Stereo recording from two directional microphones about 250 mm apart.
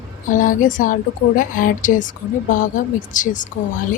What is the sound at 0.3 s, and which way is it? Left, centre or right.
Speech, left.